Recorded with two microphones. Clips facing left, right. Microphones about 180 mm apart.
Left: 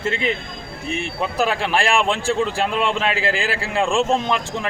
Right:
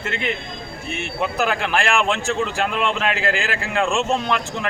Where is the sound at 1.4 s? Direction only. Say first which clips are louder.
Left 2 dB; 30° left (ahead or behind).